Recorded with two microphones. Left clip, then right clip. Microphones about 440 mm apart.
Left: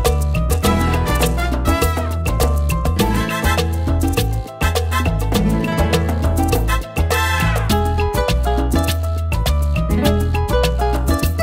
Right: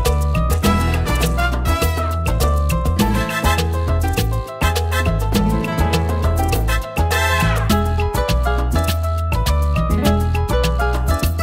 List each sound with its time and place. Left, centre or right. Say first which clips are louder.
0.6 s music: left 3 dB; left
3.0 s music: even; left
7.6 s music: left 1 dB; left